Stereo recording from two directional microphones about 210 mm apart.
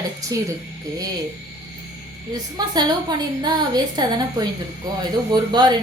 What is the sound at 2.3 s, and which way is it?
A woman's voice, 20° right (ahead or behind).